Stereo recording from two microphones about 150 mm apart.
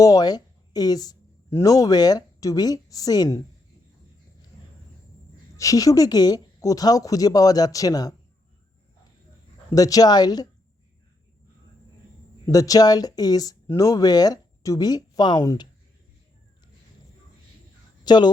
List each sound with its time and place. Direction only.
0.0 s speech: 25° left (ahead or behind)
5.5 s speech: 20° left (ahead or behind)
9.6 s speech: 25° left (ahead or behind)
12.5 s speech: 25° left (ahead or behind)
18.0 s speech: 30° left (ahead or behind)